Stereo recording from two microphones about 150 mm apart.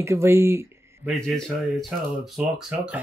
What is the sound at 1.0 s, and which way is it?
Speech, centre (ahead or behind).